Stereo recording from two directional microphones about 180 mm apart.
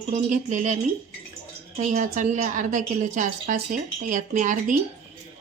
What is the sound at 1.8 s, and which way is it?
A woman's voice, 45° right (ahead or behind).